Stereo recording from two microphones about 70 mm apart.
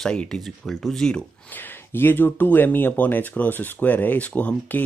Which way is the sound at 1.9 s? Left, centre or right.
Left.